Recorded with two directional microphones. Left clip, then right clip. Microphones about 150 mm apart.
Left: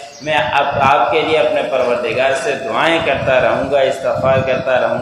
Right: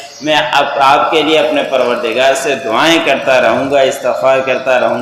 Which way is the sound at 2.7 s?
35° right (ahead or behind).